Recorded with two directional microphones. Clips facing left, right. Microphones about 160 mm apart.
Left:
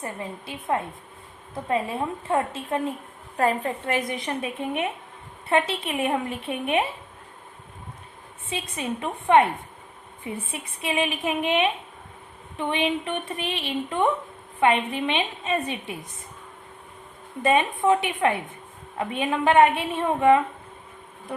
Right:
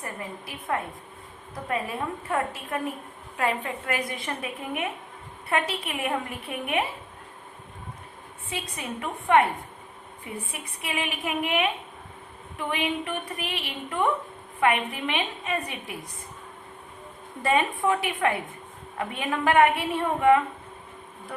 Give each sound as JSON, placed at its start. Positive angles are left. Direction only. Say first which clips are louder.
{"t": 0.0, "sound": "a woman's voice", "louder": "left 3 dB", "side_deg": 25}
{"t": 3.3, "sound": "a woman's voice", "louder": "left 4 dB", "side_deg": 40}
{"t": 8.4, "sound": "a woman's voice", "louder": "left 4 dB", "side_deg": 25}
{"t": 10.5, "sound": "a woman's voice", "louder": "left 7 dB", "side_deg": 25}
{"t": 17.4, "sound": "a woman's voice", "louder": "left 3 dB", "side_deg": 20}